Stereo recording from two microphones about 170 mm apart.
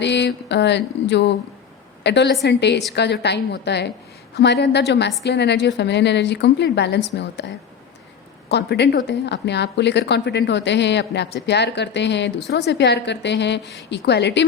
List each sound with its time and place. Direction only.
0.0 s a woman's voice: 90° left
8.4 s a woman's voice: 80° left